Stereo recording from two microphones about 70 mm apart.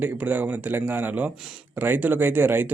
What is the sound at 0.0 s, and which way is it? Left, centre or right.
A man's voice, right.